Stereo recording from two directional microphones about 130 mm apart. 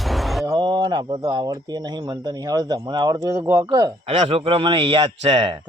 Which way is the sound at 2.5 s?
30° right (ahead or behind).